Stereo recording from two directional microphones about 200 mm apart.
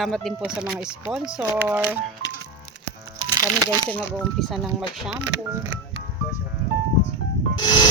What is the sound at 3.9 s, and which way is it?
Speech, 5° left (ahead or behind).